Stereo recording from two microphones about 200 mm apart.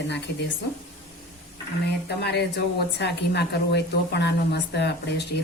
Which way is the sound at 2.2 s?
55° left (ahead or behind).